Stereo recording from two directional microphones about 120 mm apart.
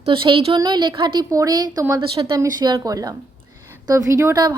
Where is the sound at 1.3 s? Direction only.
30° right (ahead or behind).